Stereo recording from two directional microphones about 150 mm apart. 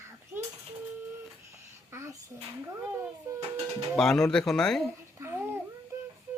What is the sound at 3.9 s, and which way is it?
Speech, 5° left (ahead or behind).